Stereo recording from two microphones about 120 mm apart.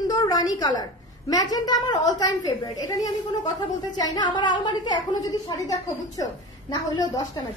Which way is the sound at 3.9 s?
35° left (ahead or behind).